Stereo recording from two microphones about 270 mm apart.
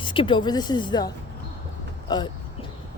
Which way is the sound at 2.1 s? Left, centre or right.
Centre.